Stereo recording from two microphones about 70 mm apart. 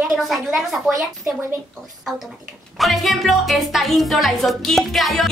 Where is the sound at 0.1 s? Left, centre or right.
Centre.